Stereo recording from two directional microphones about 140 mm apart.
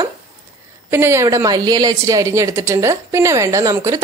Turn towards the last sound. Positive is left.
turn(degrees=-25)  # may be behind; listen again after turning